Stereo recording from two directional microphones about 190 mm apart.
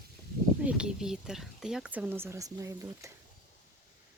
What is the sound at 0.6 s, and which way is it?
Speech, 5° right (ahead or behind).